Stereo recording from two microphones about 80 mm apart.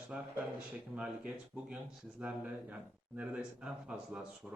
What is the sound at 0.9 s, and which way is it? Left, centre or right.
Speech, centre.